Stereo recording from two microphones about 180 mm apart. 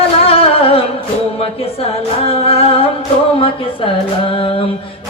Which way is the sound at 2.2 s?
35° left (ahead or behind).